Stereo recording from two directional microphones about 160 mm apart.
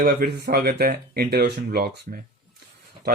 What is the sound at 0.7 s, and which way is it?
Speech, 70° right (ahead or behind).